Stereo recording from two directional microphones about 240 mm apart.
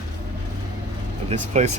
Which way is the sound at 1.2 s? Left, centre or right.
Right.